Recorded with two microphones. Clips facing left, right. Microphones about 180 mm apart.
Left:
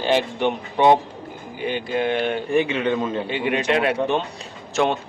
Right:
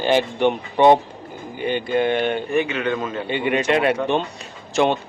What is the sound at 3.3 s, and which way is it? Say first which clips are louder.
Speech: right 4 dB; centre (ahead or behind).